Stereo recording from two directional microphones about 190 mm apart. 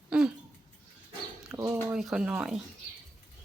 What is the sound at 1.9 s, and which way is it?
Speech, 5° right (ahead or behind).